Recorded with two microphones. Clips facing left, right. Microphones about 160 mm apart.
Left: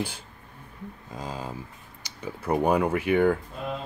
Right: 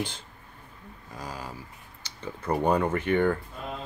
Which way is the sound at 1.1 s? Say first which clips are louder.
Left 3 dB; 25° left (ahead or behind).